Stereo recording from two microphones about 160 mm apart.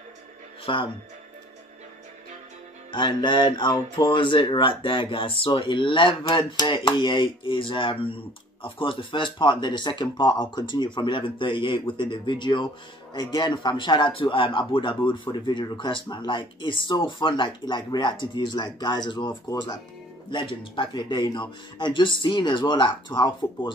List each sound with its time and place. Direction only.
0.7 s speech: 30° left (ahead or behind)
2.9 s speech: 30° left (ahead or behind)